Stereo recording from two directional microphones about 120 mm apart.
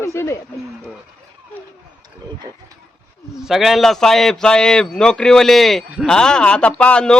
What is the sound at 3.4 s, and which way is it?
A man's voice, 5° right (ahead or behind).